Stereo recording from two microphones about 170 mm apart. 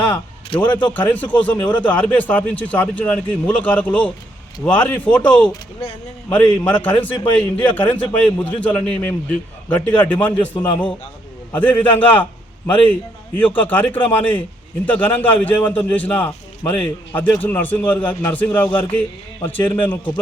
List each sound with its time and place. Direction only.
0.1 s a sound: 25° left (ahead or behind)
0.9 s a man's voice: 10° left (ahead or behind)
6.7 s a man's voice: 10° left (ahead or behind)